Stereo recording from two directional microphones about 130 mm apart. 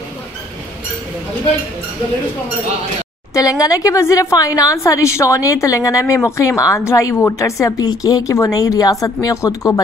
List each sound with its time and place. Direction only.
3.3 s a woman's voice: 25° left (ahead or behind)